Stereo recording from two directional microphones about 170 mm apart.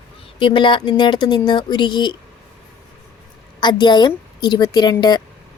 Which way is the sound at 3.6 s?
25° left (ahead or behind).